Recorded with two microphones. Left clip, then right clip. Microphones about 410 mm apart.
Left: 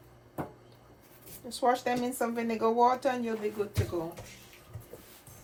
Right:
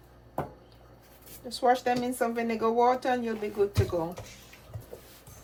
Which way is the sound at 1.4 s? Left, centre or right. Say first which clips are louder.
Right 3 dB; centre.